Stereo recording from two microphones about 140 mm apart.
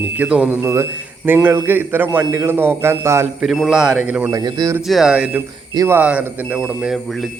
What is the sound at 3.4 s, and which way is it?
Speech, centre (ahead or behind).